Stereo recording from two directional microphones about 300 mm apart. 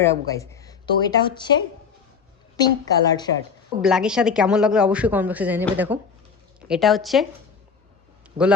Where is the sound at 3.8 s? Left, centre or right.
Centre.